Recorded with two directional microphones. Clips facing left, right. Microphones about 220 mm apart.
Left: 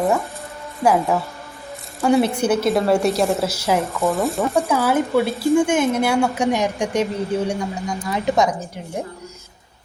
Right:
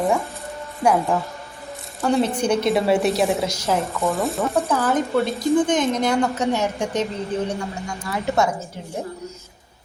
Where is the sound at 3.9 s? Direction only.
Centre (ahead or behind).